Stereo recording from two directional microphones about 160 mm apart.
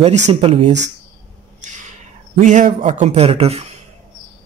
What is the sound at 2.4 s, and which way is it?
A man's voice, 50° right (ahead or behind).